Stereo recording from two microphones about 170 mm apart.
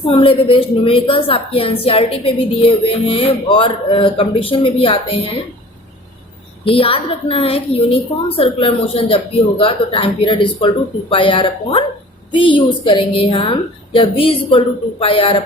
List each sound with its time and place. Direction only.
0.0 s a woman's voice: 35° left (ahead or behind)
6.7 s a woman's voice: 35° left (ahead or behind)